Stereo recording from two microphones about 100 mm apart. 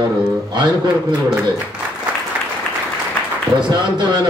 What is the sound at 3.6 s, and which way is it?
Speech, 50° right (ahead or behind).